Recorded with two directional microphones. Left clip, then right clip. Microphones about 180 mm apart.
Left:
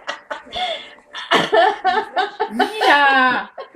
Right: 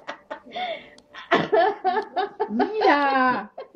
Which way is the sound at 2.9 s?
40° left (ahead or behind).